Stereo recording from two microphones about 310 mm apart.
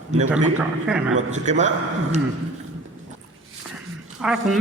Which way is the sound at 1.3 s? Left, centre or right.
Right.